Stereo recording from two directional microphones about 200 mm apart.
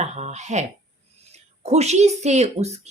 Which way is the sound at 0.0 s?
35° right (ahead or behind).